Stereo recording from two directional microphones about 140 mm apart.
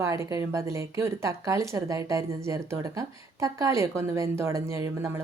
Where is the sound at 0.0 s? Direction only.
20° right (ahead or behind).